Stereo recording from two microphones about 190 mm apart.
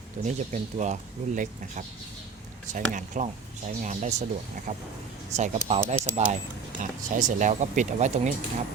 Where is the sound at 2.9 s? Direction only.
40° right (ahead or behind).